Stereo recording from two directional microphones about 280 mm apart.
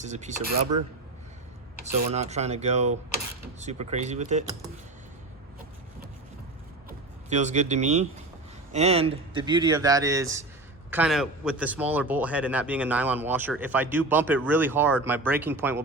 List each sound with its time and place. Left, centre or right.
0.0 s speech: right
0.5 s speech: right
1.8 s speech: right
6.8 s vehicle: right
8.7 s speech: right